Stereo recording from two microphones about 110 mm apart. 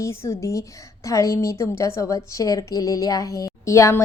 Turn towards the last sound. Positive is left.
turn(degrees=30)  # may be behind; listen again after turning